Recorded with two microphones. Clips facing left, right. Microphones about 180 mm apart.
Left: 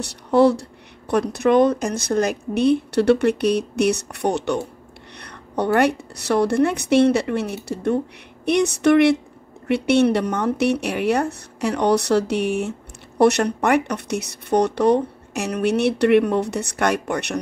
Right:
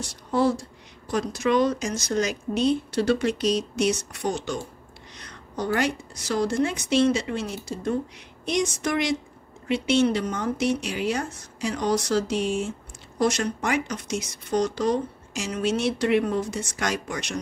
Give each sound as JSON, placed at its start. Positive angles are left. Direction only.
{"t": 0.0, "sound": "speech", "side_deg": 65}